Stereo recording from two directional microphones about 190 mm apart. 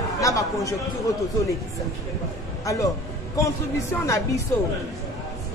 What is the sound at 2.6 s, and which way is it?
Speech, 15° left (ahead or behind).